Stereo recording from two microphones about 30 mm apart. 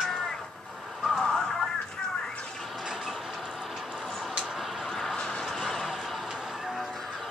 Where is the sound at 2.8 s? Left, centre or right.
Right.